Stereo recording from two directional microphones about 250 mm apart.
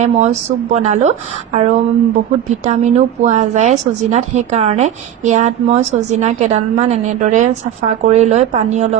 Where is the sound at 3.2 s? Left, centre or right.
Right.